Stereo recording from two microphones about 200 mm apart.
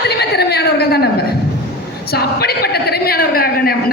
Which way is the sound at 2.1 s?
50° left (ahead or behind).